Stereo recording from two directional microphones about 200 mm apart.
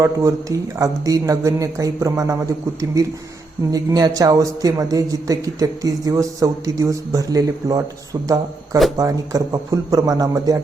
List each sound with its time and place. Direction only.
0.0 s a man's voice: 15° right (ahead or behind)
3.7 s a man's voice: 20° right (ahead or behind)